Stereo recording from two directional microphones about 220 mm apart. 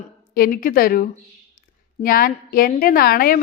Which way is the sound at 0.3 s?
40° left (ahead or behind).